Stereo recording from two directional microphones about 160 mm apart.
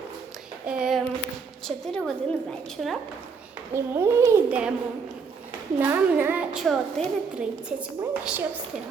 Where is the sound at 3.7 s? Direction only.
15° right (ahead or behind).